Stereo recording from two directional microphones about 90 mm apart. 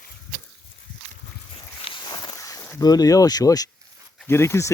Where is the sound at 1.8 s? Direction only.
65° left (ahead or behind).